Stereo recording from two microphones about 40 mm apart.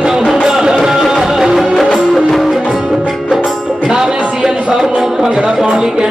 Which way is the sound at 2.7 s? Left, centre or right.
Centre.